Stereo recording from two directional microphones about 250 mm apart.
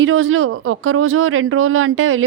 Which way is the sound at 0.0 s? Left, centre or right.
Right.